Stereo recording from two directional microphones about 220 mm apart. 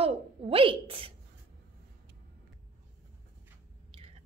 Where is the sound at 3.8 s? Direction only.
25° right (ahead or behind).